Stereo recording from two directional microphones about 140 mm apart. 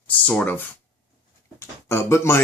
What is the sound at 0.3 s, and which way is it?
Speech, 10° left (ahead or behind).